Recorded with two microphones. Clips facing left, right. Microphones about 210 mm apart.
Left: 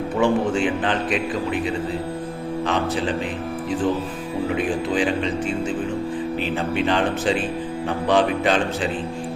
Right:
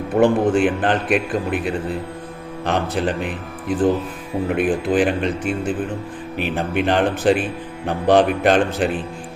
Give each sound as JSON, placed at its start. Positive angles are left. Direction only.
{"t": 0.1, "sound": "a man's voice", "side_deg": -55}
{"t": 4.4, "sound": "a man's voice", "side_deg": -55}